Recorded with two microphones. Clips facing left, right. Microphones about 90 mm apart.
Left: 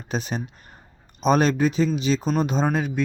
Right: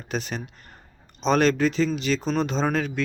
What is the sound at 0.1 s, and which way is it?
Speech, 20° left (ahead or behind).